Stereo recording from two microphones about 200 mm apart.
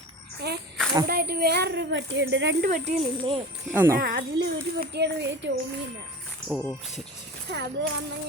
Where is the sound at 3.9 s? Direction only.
55° right (ahead or behind).